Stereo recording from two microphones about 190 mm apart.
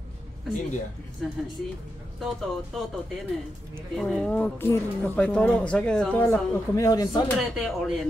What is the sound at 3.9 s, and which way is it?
Speech, 5° left (ahead or behind).